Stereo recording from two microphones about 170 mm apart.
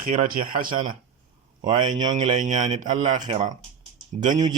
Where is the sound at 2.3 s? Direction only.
45° right (ahead or behind).